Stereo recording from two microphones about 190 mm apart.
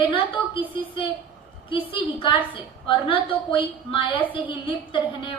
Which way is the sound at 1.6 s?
25° left (ahead or behind).